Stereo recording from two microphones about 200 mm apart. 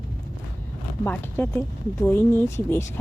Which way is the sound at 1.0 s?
10° left (ahead or behind).